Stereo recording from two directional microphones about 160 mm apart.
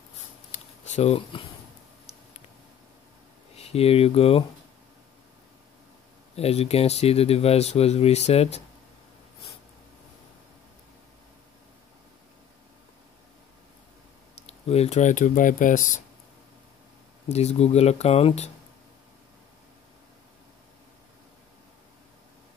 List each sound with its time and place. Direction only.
0.5 s a sound: 45° left (ahead or behind)
3.5 s speech: 40° left (ahead or behind)
6.3 s speech: 40° left (ahead or behind)
14.4 s speech: 40° left (ahead or behind)
17.3 s speech: 45° left (ahead or behind)